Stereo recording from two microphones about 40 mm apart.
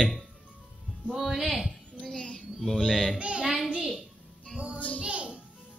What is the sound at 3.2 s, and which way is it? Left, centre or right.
Child singing, right.